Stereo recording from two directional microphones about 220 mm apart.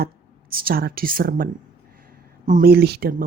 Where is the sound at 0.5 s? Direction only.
40° right (ahead or behind).